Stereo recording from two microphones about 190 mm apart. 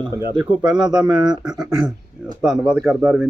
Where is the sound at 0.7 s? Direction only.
25° right (ahead or behind).